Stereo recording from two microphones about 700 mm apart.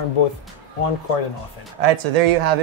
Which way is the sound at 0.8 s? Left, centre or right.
Left.